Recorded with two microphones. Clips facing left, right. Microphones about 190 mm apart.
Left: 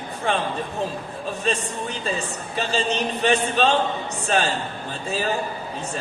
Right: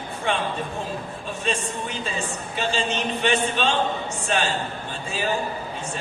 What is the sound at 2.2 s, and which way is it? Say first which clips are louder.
A man's voice: even; 40° left (ahead or behind).